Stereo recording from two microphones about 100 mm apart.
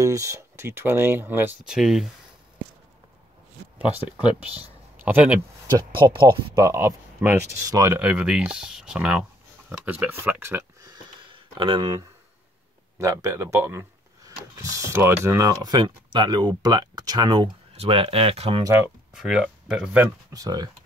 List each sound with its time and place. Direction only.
0.0 s speech: 30° right (ahead or behind)
1.7 s speech: 5° right (ahead or behind)
5.0 s speech: 15° right (ahead or behind)
5.9 s speech: 55° right (ahead or behind)
6.7 s speech: 25° right (ahead or behind)
8.0 s speech: 10° right (ahead or behind)
9.7 s speech: 20° right (ahead or behind)
11.2 s a sound: 55° right (ahead or behind)
11.8 s speech: 40° right (ahead or behind)
15.6 s speech: 50° right (ahead or behind)
17.7 s speech: 70° right (ahead or behind)
19.1 s speech: 5° right (ahead or behind)
20.3 s speech: 40° right (ahead or behind)